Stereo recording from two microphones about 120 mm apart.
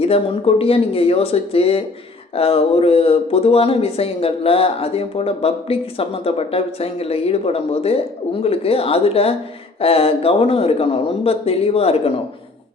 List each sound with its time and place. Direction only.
0.0 s speech: 55° left (ahead or behind)